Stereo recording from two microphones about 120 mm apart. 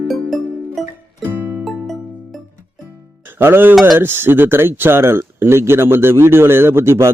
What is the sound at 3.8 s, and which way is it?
Speech, 20° right (ahead or behind).